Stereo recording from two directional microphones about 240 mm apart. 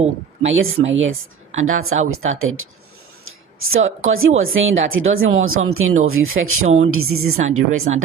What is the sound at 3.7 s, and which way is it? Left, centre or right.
Speech, right.